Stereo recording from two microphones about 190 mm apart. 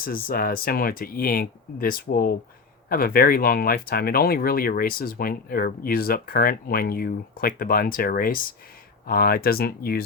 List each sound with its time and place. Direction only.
0.0 s speech: 50° left (ahead or behind)